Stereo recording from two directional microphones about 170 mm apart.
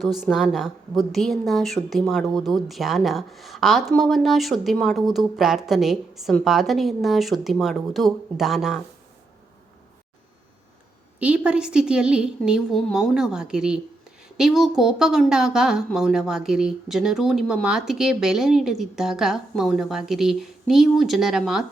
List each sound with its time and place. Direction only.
0.0 s a woman's voice: centre (ahead or behind)
11.2 s a woman's voice: 5° right (ahead or behind)